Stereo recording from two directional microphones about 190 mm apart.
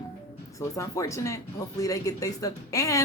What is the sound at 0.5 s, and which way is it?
Speech, 15° left (ahead or behind).